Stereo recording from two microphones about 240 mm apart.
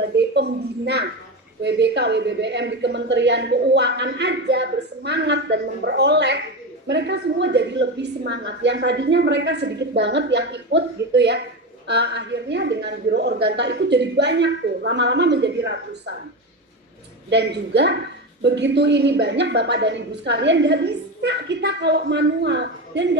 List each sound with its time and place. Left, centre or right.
0.0 s a sound: right
1.6 s speech: right
17.3 s speech: right